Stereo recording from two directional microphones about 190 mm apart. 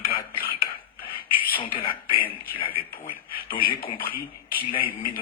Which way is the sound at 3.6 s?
50° left (ahead or behind).